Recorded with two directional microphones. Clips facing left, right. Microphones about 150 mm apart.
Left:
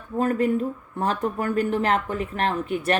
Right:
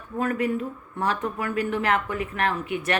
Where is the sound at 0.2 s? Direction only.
35° left (ahead or behind).